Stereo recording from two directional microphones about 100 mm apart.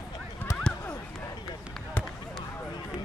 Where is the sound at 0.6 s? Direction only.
10° left (ahead or behind).